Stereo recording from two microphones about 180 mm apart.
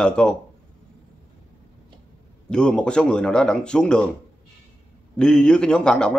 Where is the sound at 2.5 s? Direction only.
5° left (ahead or behind).